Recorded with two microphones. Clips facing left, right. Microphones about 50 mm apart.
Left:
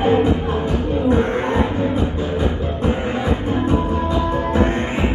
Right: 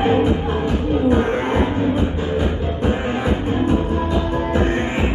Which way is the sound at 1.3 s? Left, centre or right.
Right.